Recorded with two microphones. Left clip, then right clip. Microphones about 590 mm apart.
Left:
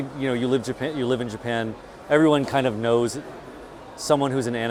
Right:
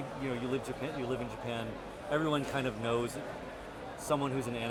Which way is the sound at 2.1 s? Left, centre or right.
Left.